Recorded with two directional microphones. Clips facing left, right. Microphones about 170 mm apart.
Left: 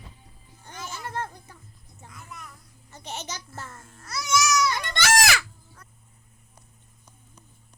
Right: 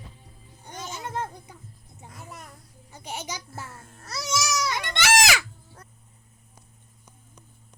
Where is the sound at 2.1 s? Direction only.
35° right (ahead or behind).